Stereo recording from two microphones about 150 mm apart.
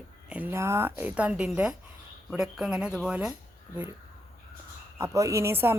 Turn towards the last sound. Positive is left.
turn(degrees=-15)  # may be behind; listen again after turning